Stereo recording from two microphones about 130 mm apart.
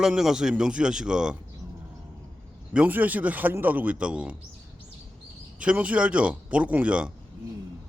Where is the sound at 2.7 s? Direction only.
10° right (ahead or behind).